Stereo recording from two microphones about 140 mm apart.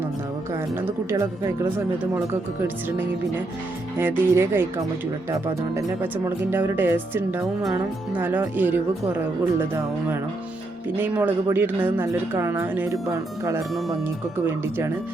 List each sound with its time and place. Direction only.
0.8 s speech: 20° right (ahead or behind)
3.9 s a woman's voice: 15° right (ahead or behind)
5.7 s a woman's voice: 15° right (ahead or behind)
10.9 s a woman's voice: 10° right (ahead or behind)